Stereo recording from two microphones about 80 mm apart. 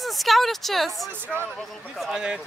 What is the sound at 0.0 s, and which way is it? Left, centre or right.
Speech, centre.